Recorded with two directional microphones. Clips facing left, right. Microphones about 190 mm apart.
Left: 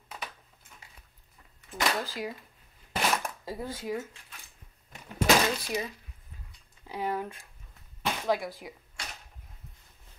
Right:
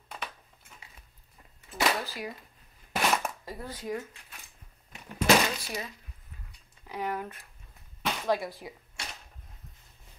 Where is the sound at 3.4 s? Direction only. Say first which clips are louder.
Left 2 dB; 10° left (ahead or behind).